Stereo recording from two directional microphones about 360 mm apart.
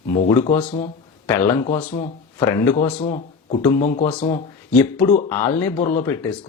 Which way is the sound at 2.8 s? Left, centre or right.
Centre.